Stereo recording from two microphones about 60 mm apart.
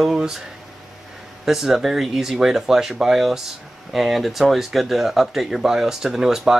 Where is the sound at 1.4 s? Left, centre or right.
Centre.